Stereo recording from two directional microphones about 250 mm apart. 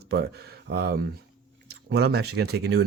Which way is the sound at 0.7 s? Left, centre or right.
Right.